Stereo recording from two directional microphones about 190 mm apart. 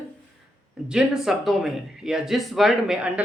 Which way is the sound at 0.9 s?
5° right (ahead or behind).